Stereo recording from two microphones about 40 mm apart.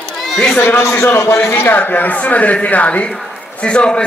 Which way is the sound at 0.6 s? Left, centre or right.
Left.